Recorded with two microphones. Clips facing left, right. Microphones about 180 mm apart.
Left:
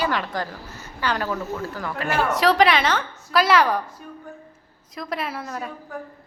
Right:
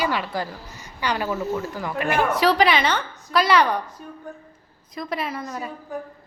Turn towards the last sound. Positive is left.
turn(degrees=0)  # may be behind; listen again after turning